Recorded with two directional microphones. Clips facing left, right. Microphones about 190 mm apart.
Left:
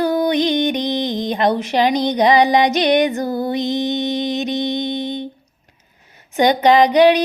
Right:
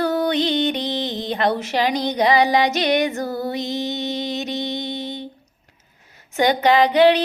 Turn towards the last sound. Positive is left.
turn(degrees=15)  # may be behind; listen again after turning